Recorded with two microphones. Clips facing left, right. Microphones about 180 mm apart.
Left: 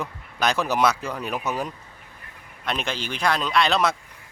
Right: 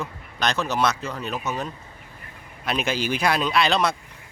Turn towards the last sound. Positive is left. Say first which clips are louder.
# even
turn(degrees=0)  # may be behind; listen again after turning